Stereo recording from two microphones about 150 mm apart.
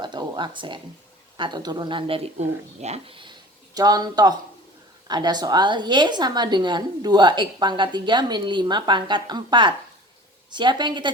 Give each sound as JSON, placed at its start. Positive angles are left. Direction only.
{"t": 0.0, "sound": "speech", "side_deg": -30}
{"t": 3.8, "sound": "a woman's voice", "side_deg": -25}